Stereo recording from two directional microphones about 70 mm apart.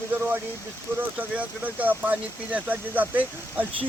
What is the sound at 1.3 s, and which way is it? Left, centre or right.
Speech, right.